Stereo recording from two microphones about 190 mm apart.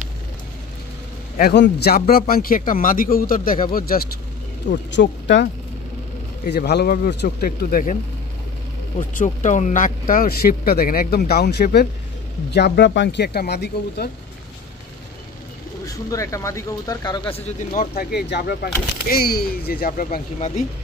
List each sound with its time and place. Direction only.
1.5 s speech: 60° left (ahead or behind)
4.6 s speech: 65° left (ahead or behind)
6.5 s speech: 60° left (ahead or behind)
15.8 s speech: 15° left (ahead or behind)
17.7 s speech: 55° left (ahead or behind); by 20.6 s 35° left (ahead or behind)